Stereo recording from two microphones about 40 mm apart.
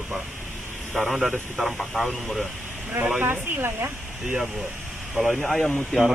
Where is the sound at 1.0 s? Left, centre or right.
Centre.